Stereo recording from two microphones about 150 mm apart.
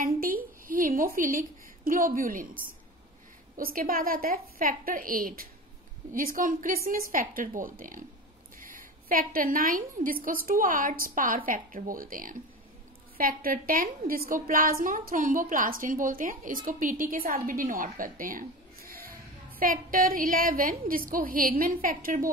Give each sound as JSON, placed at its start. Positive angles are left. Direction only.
{"t": 0.0, "sound": "a sound", "side_deg": -65}
{"t": 1.9, "sound": "a woman's voice", "side_deg": -70}
{"t": 3.5, "sound": "a woman's voice", "side_deg": -70}
{"t": 19.6, "sound": "a woman's voice", "side_deg": -70}